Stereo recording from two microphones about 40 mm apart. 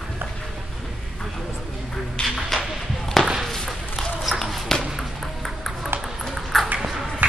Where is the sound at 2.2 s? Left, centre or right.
Left.